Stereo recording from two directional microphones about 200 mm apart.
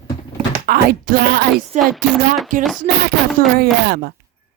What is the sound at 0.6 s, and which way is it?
Speech, 45° right (ahead or behind).